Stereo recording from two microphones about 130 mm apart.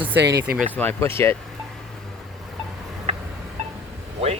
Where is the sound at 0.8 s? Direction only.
15° left (ahead or behind).